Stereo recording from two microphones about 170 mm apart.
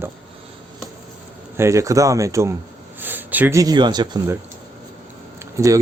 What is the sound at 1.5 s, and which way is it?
Speech, 15° right (ahead or behind).